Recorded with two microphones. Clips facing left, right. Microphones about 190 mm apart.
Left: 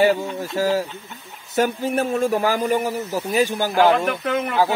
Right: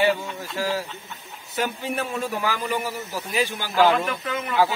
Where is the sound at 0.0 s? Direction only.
40° left (ahead or behind).